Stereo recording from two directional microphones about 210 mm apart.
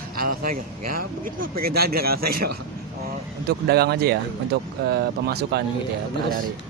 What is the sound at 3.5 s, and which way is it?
A man's voice, 50° right (ahead or behind).